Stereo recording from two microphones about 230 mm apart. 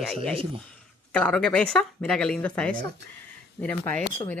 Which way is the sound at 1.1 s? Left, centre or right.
Centre.